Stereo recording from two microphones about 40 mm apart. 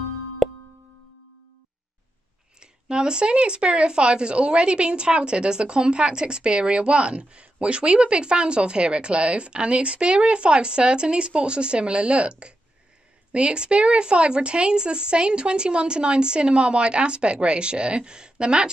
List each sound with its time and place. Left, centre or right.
2.6 s speech: right